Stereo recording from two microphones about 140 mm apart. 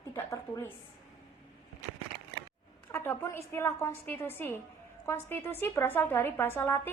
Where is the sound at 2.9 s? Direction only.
15° left (ahead or behind).